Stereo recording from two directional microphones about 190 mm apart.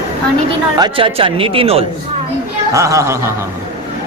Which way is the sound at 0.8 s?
25° right (ahead or behind).